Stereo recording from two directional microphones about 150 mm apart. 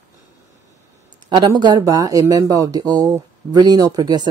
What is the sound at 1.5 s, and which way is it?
Speech, 30° right (ahead or behind).